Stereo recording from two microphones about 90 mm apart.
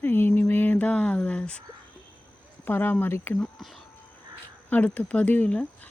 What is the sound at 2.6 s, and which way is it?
Speech, 20° left (ahead or behind).